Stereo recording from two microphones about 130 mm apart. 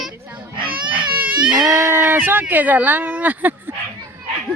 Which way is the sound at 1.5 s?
25° right (ahead or behind).